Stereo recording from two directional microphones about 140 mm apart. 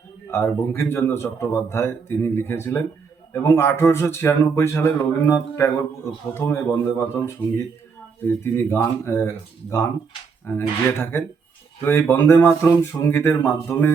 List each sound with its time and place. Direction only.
0.3 s a man's voice: 15° left (ahead or behind)